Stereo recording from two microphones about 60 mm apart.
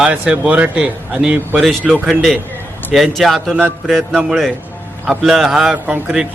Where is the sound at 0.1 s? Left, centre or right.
Right.